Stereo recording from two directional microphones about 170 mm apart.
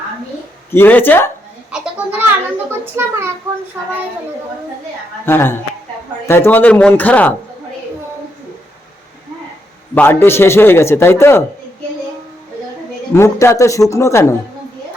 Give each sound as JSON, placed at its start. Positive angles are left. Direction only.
{"t": 0.7, "sound": "a man's voice", "side_deg": 10}
{"t": 1.7, "sound": "children playing", "side_deg": -10}
{"t": 2.8, "sound": "a sound", "side_deg": -15}
{"t": 5.2, "sound": "a man's voice", "side_deg": 15}
{"t": 9.9, "sound": "a man's voice", "side_deg": 10}
{"t": 13.1, "sound": "a man's voice", "side_deg": 15}